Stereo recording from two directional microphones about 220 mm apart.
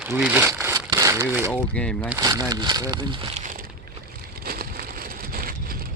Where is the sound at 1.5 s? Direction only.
5° left (ahead or behind).